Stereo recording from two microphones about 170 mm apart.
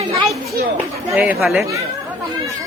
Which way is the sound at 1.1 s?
Centre (ahead or behind).